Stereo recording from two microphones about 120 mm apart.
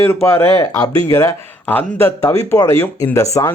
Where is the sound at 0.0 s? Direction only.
20° left (ahead or behind).